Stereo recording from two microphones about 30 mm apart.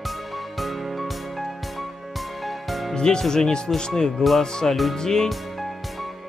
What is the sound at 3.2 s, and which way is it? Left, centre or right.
Speech, left.